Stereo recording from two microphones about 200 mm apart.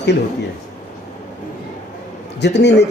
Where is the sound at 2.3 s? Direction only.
60° left (ahead or behind).